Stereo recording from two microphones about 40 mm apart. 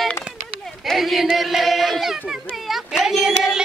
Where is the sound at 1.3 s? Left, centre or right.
Centre.